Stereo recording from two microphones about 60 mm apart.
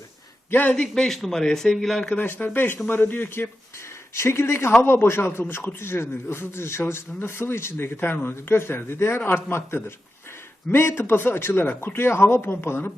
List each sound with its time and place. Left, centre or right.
0.5 s speech: left
0.8 s a man's voice: centre
2.0 s a man's voice: left